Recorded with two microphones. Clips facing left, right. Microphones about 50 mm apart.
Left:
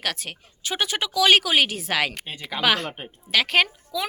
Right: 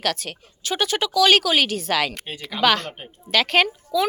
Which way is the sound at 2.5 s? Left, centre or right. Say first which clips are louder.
Right 3 dB; centre.